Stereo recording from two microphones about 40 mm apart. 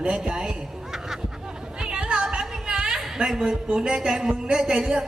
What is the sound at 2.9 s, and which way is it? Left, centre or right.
A woman's voice, centre.